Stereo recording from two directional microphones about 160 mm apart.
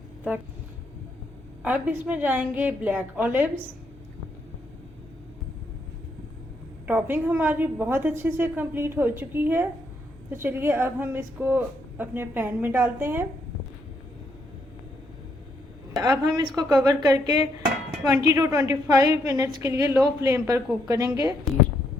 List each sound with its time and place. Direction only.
1.6 s a woman's voice: 10° right (ahead or behind)
6.8 s a woman's voice: 10° right (ahead or behind)
16.0 s a woman's voice: 25° right (ahead or behind)